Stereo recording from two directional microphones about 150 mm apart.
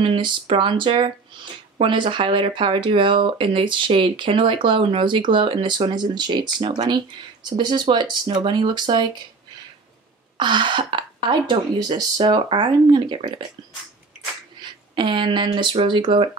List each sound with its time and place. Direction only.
0.0 s speech: 35° right (ahead or behind)
10.3 s speech: 30° right (ahead or behind)
14.6 s speech: 30° right (ahead or behind)